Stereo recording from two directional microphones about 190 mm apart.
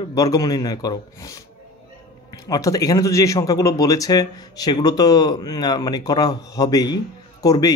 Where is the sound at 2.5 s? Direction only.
20° left (ahead or behind).